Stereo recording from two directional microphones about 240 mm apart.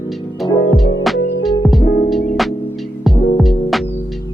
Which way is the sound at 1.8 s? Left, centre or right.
Left.